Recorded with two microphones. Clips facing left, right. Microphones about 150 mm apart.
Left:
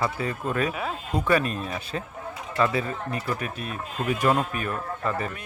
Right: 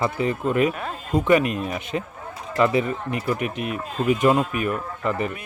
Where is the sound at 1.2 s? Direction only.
20° right (ahead or behind).